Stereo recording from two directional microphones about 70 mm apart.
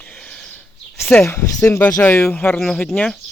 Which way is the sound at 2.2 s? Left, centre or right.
Centre.